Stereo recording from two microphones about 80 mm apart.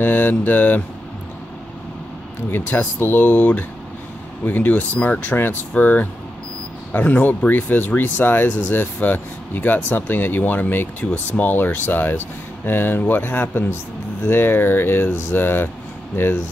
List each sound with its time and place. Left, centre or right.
0.0 s speech: left
2.5 s speech: left